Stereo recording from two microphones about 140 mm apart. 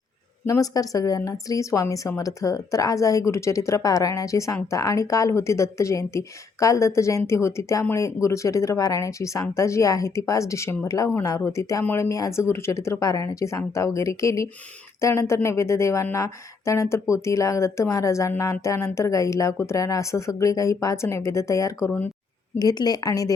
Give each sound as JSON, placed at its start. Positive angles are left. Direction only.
{"t": 0.4, "sound": "a woman's voice", "side_deg": 25}
{"t": 22.5, "sound": "a woman's voice", "side_deg": 30}